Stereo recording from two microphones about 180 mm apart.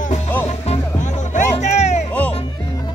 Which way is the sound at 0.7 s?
45° left (ahead or behind).